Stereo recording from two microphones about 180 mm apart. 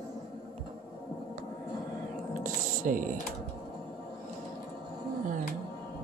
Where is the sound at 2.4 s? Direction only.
50° right (ahead or behind).